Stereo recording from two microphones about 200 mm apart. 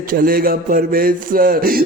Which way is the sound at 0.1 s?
45° right (ahead or behind).